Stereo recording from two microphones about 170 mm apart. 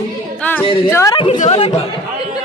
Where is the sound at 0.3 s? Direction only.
10° left (ahead or behind).